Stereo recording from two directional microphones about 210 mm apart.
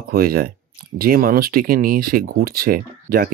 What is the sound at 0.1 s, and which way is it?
Speech, 45° right (ahead or behind).